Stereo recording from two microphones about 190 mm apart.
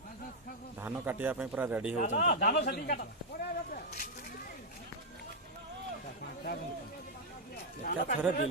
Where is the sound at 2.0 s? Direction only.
40° left (ahead or behind).